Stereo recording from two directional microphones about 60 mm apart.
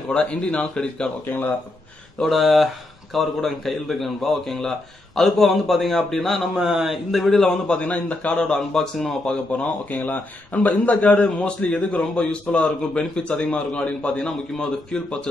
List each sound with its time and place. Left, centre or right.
0.1 s a man's voice: centre
2.2 s speech: centre
6.5 s speech: centre
7.6 s a man's voice: centre
9.8 s a man's voice: left